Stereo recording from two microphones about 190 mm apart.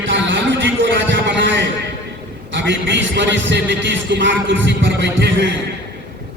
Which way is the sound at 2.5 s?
70° right (ahead or behind).